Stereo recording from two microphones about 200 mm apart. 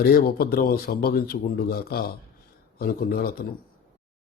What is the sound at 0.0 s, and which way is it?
Speech, 50° left (ahead or behind).